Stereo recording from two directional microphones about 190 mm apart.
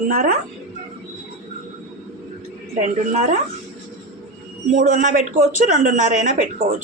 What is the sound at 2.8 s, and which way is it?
Speech, 40° right (ahead or behind).